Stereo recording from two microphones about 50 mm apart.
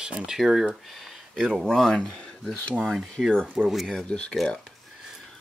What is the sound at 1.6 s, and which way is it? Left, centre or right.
Speech, centre.